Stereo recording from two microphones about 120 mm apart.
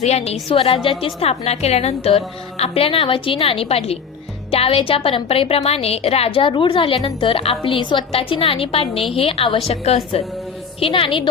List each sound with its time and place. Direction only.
0.0 s a woman's voice: 65° left (ahead or behind)
0.4 s a woman's voice: 50° left (ahead or behind)